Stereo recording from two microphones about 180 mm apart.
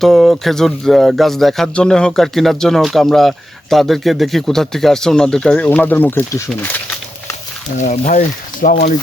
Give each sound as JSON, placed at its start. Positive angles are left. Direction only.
{"t": 0.0, "sound": "speech", "side_deg": 0}
{"t": 7.8, "sound": "speech", "side_deg": 45}